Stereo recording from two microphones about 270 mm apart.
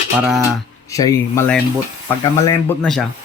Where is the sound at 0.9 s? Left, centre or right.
Centre.